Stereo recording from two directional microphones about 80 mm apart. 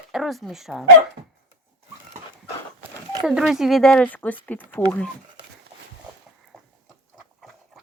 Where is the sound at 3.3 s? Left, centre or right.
Centre.